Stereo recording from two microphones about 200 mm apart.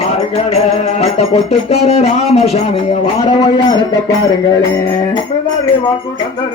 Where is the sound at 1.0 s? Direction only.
30° left (ahead or behind).